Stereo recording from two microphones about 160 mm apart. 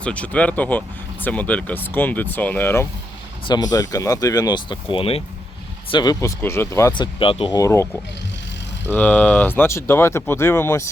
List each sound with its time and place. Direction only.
0.0 s speech: 10° left (ahead or behind)
3.4 s speech: 25° left (ahead or behind)
6.9 s speech: 30° left (ahead or behind)
8.9 s speech: 10° left (ahead or behind)